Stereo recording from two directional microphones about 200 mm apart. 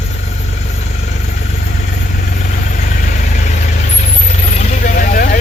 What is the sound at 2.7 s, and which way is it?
Vehicle, 40° left (ahead or behind).